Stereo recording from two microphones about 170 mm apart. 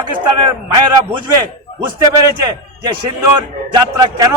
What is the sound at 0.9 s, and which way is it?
A man's voice, 25° right (ahead or behind).